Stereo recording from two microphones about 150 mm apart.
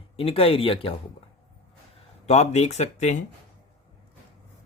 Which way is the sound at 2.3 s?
45° left (ahead or behind).